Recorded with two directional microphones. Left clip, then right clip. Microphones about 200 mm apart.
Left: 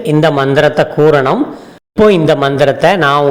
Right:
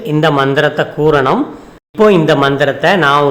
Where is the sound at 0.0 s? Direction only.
15° left (ahead or behind).